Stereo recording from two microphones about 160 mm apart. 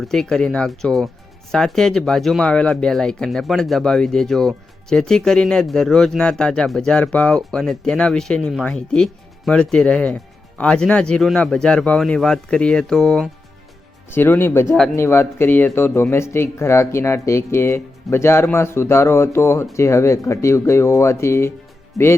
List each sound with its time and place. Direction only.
0.0 s speech: 5° left (ahead or behind)
22.0 s speech: centre (ahead or behind)